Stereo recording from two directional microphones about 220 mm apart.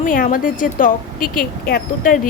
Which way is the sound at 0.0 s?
40° left (ahead or behind).